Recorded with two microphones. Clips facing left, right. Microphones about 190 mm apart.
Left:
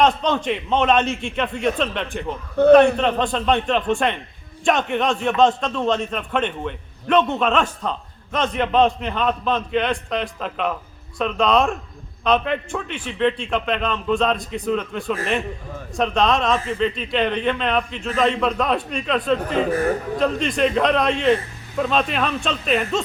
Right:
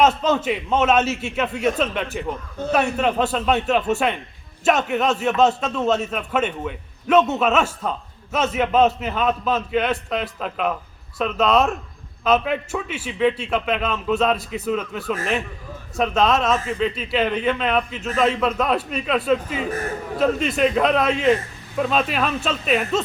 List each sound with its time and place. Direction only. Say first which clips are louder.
0.2 s a man's voice: right 1 dB; 5° right (ahead or behind)
19.4 s speech: left 7 dB; 60° left (ahead or behind)
20.1 s a man's voice: right 1 dB; 5° right (ahead or behind)